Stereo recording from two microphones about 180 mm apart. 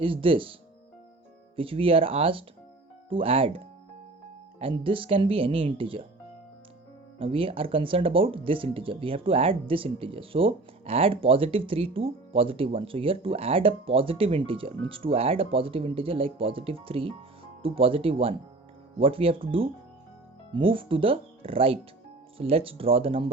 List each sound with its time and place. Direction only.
0.0 s speech: 30° right (ahead or behind)
1.5 s speech: 30° right (ahead or behind)
4.6 s speech: 30° right (ahead or behind)
7.2 s speech: 30° right (ahead or behind)